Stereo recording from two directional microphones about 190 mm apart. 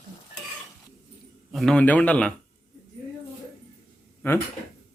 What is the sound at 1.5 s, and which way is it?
Speech, 5° left (ahead or behind).